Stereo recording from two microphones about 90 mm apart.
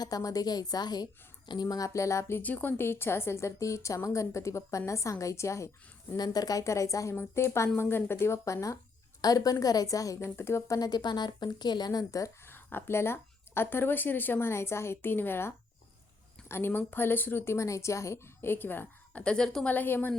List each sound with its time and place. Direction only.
0.0 s a woman's voice: 45° left (ahead or behind)
1.6 s a woman's voice: 40° left (ahead or behind)
6.1 s a woman's voice: 45° left (ahead or behind); by 10.8 s 30° left (ahead or behind)
10.8 s a woman's voice: 50° left (ahead or behind)
12.4 s speech: 25° left (ahead or behind)
19.2 s a woman's voice: 10° left (ahead or behind)
19.7 s speech: 20° left (ahead or behind)